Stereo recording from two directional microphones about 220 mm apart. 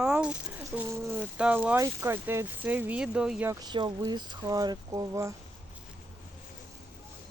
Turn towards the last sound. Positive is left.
turn(degrees=-15)  # may be behind; listen again after turning